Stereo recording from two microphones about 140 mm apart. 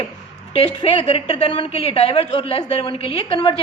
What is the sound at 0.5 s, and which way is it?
A woman's voice, 40° left (ahead or behind).